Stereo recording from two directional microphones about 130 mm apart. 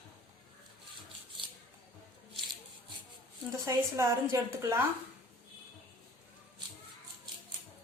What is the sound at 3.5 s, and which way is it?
A woman's voice, 25° right (ahead or behind).